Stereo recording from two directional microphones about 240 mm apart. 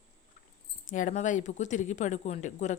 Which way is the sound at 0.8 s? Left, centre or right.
Left.